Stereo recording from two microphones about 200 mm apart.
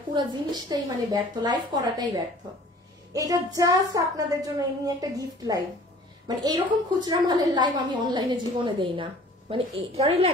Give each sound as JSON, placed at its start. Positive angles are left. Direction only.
{"t": 0.1, "sound": "a woman's voice", "side_deg": -20}
{"t": 6.2, "sound": "a woman's voice", "side_deg": -20}